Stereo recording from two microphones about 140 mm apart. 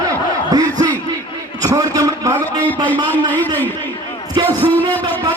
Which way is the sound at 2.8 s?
15° left (ahead or behind).